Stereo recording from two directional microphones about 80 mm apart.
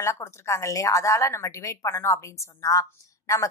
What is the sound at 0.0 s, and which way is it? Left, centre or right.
A woman's voice, left.